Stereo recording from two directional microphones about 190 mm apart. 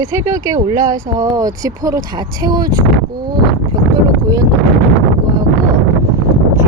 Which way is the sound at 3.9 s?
15° right (ahead or behind).